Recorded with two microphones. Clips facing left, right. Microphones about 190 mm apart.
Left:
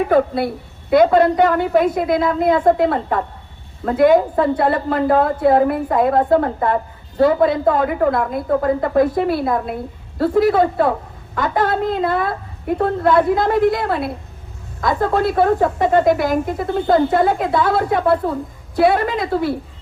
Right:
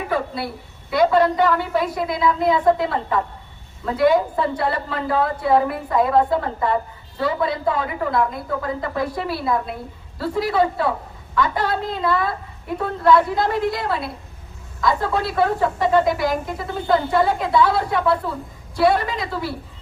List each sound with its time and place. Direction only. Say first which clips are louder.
0.1 s a woman's voice: left 8 dB; 50° left (ahead or behind)